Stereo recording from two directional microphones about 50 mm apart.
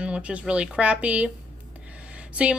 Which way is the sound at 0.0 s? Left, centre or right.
Right.